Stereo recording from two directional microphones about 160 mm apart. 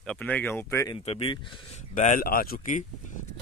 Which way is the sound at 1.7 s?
50° left (ahead or behind).